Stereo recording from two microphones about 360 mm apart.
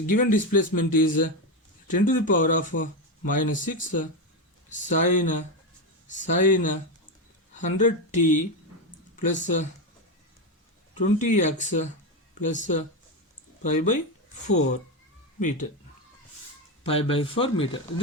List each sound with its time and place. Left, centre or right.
0.1 s speech: left
11.2 s speech: centre
16.8 s speech: centre